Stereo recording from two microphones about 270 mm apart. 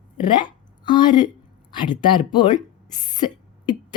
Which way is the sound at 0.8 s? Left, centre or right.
Centre.